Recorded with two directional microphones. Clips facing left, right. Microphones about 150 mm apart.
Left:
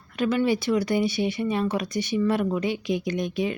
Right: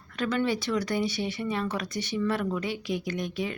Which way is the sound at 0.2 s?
10° left (ahead or behind).